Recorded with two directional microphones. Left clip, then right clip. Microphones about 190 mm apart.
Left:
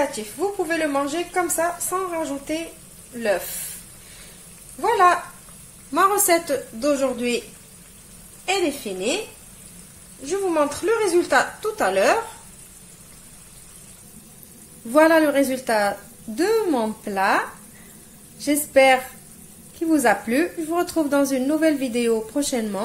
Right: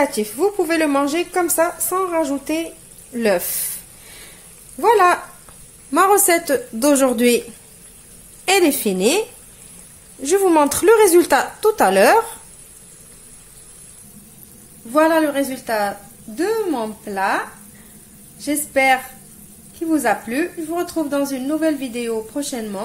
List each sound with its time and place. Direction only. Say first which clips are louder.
0.0 s a woman's voice: right 6 dB; 55° right (ahead or behind)
4.7 s a woman's voice: right 3 dB; 55° right (ahead or behind)
5.9 s speech: right 4 dB; 35° right (ahead or behind); by 7.4 s 50° right (ahead or behind)
8.5 s a woman's voice: right 7 dB; 50° right (ahead or behind)
10.2 s a woman's voice: right 7 dB; 50° right (ahead or behind)
14.9 s a woman's voice: even; 5° left (ahead or behind)